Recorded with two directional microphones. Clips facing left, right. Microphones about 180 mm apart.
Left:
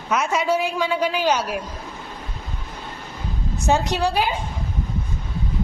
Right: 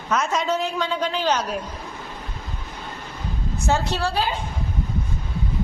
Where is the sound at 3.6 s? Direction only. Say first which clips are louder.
Left 3 dB; 15° left (ahead or behind).